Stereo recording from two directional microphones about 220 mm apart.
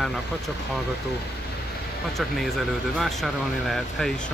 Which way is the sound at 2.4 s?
Centre (ahead or behind).